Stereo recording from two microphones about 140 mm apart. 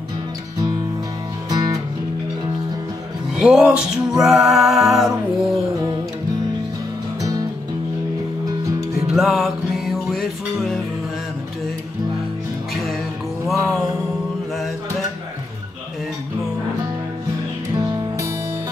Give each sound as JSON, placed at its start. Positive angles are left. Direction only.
{"t": 1.5, "sound": "music", "side_deg": -30}
{"t": 3.3, "sound": "music", "side_deg": -5}
{"t": 9.1, "sound": "music", "side_deg": 0}
{"t": 13.5, "sound": "music", "side_deg": 0}
{"t": 17.7, "sound": "music", "side_deg": -20}